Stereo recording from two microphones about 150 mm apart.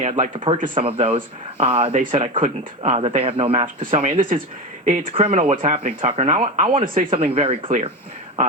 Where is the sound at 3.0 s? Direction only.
40° right (ahead or behind).